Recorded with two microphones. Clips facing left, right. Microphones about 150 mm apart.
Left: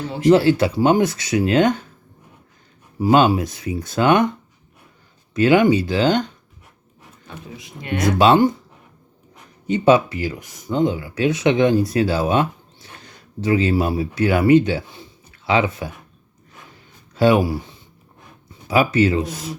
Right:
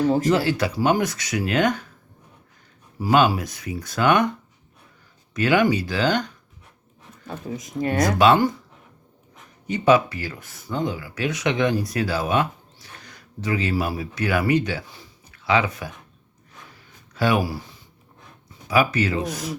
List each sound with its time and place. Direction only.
0.0 s speech: 40° right (ahead or behind)
0.3 s speech: 25° left (ahead or behind)
3.0 s speech: 25° left (ahead or behind)
5.3 s speech: 25° left (ahead or behind)
7.3 s speech: 40° right (ahead or behind)
8.0 s speech: 25° left (ahead or behind)
9.6 s speech: 25° left (ahead or behind)
17.2 s speech: 25° left (ahead or behind)